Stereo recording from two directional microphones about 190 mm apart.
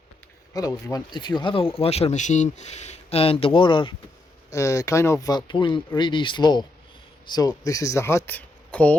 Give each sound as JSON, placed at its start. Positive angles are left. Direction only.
{"t": 0.5, "sound": "speech", "side_deg": 20}